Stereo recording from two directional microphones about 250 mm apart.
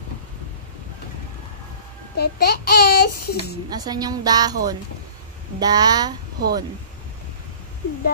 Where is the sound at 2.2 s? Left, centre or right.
Left.